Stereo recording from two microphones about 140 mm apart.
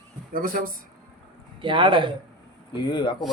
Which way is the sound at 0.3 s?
90° right.